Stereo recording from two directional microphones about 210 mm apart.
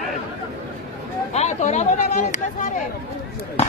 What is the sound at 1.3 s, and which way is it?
Speech, 35° left (ahead or behind).